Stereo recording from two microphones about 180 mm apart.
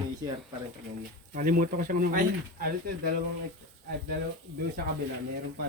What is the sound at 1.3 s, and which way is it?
Speech, 50° right (ahead or behind).